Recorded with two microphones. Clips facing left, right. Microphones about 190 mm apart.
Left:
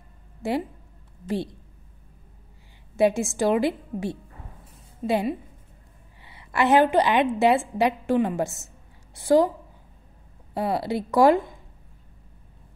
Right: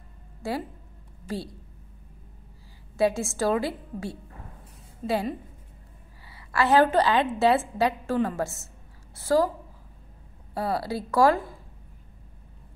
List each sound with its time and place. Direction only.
0.4 s a woman's voice: 20° left (ahead or behind)
3.0 s a woman's voice: 15° left (ahead or behind)
10.5 s speech: 20° left (ahead or behind)